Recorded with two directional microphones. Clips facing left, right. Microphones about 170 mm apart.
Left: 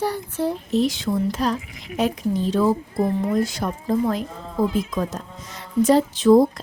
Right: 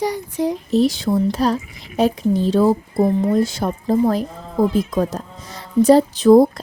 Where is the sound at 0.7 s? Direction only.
35° right (ahead or behind).